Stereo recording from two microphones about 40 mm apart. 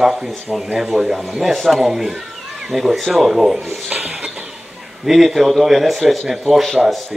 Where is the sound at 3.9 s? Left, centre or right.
Right.